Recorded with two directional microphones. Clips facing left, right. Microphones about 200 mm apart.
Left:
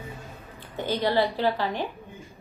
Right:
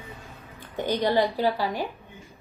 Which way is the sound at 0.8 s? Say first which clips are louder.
Right 1 dB; 15° right (ahead or behind).